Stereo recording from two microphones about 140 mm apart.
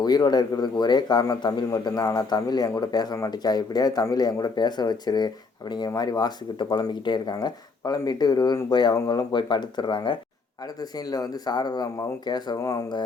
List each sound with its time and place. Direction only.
0.0 s a man's voice: 30° left (ahead or behind)